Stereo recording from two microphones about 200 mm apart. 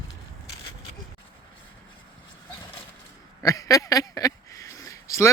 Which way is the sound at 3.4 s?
15° left (ahead or behind).